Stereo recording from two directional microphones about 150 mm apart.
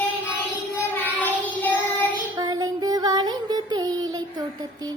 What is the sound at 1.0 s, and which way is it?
Child singing, 15° left (ahead or behind).